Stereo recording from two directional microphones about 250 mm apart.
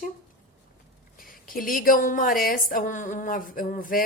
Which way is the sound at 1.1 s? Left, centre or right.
Left.